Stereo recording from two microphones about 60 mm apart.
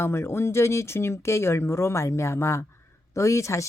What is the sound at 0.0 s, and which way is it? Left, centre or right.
Speech, left.